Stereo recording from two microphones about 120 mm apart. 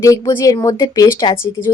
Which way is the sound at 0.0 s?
30° left (ahead or behind).